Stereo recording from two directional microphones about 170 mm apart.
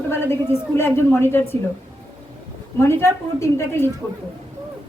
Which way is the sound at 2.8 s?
15° left (ahead or behind).